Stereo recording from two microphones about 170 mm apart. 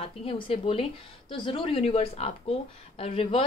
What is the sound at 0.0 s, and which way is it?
A woman's voice, 35° left (ahead or behind).